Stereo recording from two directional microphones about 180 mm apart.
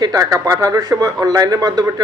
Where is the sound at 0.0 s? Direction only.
20° right (ahead or behind).